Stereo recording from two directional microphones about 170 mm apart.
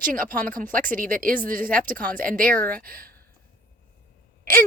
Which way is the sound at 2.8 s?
60° right (ahead or behind).